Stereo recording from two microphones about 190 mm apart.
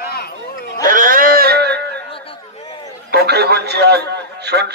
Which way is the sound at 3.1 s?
60° right (ahead or behind).